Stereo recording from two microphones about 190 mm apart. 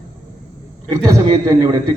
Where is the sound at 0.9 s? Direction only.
15° right (ahead or behind).